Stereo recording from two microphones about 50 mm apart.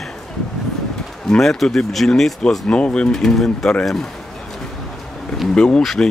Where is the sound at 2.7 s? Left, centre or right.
Centre.